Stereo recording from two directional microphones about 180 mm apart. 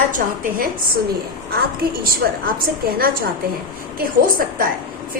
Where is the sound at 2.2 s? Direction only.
60° right (ahead or behind).